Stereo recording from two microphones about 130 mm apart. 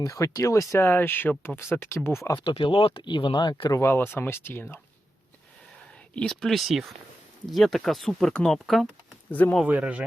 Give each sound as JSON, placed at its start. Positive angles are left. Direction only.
{"t": 0.0, "sound": "speech", "side_deg": 25}
{"t": 2.4, "sound": "speech", "side_deg": 40}
{"t": 3.8, "sound": "speech", "side_deg": 20}
{"t": 6.1, "sound": "speech", "side_deg": 5}
{"t": 9.3, "sound": "speech", "side_deg": 10}
{"t": 9.6, "sound": "speech", "side_deg": -10}